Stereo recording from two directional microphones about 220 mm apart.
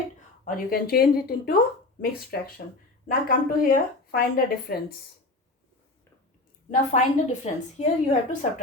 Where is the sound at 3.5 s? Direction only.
40° left (ahead or behind).